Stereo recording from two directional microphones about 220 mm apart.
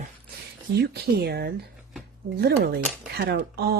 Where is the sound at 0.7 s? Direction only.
45° right (ahead or behind).